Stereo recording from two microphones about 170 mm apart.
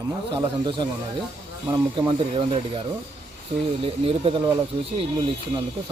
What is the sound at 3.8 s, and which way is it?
Speech, 35° right (ahead or behind).